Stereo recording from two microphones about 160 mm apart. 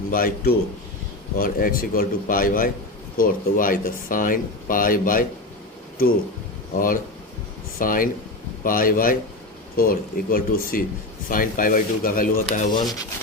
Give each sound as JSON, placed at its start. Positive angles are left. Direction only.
{"t": 0.1, "sound": "speech", "side_deg": 60}
{"t": 6.7, "sound": "speech", "side_deg": 60}
{"t": 12.7, "sound": "speech", "side_deg": 25}